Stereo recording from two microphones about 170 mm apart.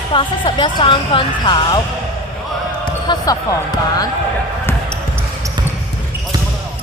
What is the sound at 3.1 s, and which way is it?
Speech, 25° left (ahead or behind).